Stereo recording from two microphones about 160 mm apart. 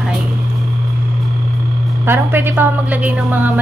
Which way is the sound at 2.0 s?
15° right (ahead or behind).